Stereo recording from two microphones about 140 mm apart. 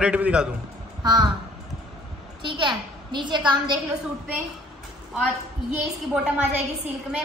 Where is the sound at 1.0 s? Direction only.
30° right (ahead or behind).